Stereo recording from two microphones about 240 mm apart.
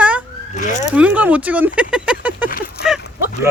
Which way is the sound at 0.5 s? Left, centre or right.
Left.